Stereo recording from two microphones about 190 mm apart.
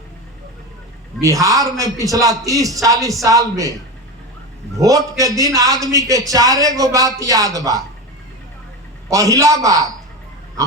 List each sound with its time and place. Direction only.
1.2 s a man's voice: 15° right (ahead or behind)
4.8 s a man's voice: 20° right (ahead or behind)
9.0 s a man's voice: 15° right (ahead or behind)